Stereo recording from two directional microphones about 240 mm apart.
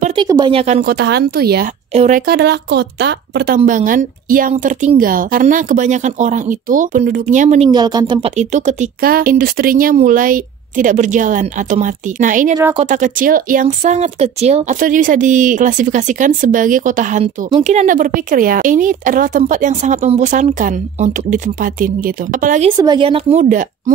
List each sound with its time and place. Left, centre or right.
0.0 s a sound: centre
0.9 s speech: right
1.9 s speech: right
22.8 s speech: centre